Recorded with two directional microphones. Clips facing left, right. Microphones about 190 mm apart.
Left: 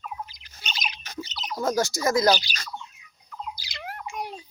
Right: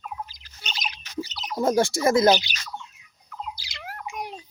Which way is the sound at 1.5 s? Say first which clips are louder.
Right 4 dB; 30° right (ahead or behind).